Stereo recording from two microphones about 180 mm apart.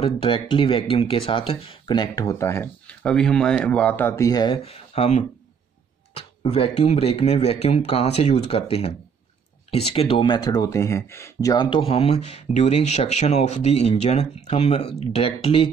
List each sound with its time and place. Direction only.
0.0 s speech: 30° left (ahead or behind)
4.6 s speech: 35° left (ahead or behind)